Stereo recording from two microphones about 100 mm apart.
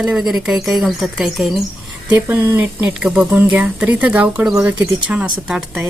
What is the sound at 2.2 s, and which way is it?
Speech, 20° right (ahead or behind).